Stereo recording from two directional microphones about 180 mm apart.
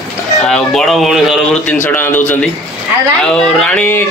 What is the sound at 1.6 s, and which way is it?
Speech, 10° left (ahead or behind).